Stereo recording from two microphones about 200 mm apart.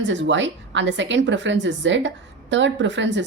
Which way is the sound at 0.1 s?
65° right (ahead or behind).